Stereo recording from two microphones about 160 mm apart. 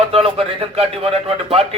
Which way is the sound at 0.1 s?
40° right (ahead or behind).